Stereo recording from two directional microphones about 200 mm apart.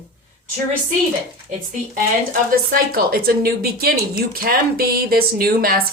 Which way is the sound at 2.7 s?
45° right (ahead or behind).